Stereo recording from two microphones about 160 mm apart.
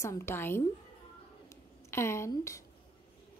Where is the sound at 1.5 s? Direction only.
15° left (ahead or behind).